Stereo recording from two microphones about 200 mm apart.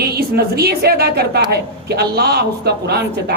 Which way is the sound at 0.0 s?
50° right (ahead or behind).